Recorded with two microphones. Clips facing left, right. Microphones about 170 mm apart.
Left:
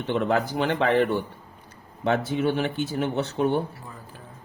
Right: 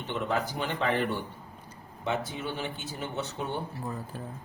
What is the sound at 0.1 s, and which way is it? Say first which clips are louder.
Speech: left 7 dB; 85° left.